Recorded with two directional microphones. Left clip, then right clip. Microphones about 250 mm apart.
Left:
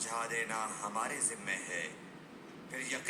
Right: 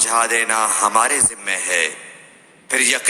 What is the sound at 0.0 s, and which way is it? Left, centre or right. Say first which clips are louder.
A man's voice: right 19 dB; right.